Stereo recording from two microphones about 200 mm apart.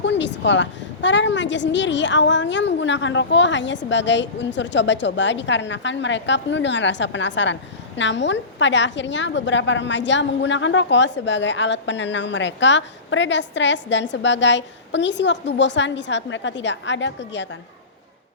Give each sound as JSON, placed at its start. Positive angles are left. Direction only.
{"t": 0.0, "sound": "a woman's voice", "side_deg": 65}